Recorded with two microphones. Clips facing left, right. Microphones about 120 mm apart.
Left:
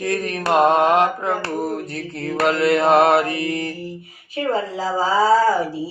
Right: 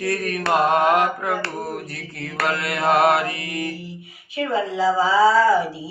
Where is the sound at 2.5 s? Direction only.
25° left (ahead or behind).